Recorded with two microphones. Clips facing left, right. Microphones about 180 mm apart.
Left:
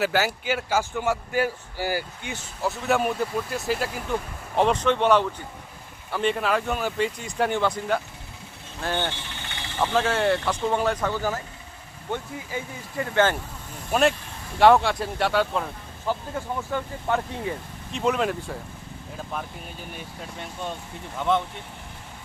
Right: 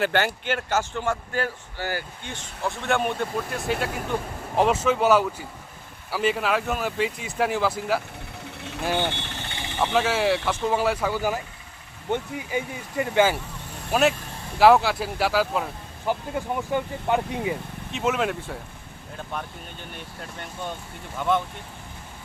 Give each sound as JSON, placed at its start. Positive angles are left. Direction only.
{"t": 0.0, "sound": "speech", "side_deg": 5}
{"t": 13.9, "sound": "speech", "side_deg": 0}
{"t": 16.1, "sound": "speech", "side_deg": -15}
{"t": 17.9, "sound": "speech", "side_deg": 0}
{"t": 21.2, "sound": "speech", "side_deg": 0}